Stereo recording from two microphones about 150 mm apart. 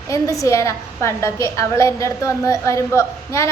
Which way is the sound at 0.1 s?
20° left (ahead or behind).